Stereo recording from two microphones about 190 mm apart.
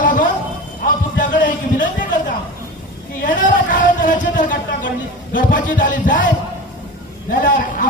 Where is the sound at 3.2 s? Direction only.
45° left (ahead or behind).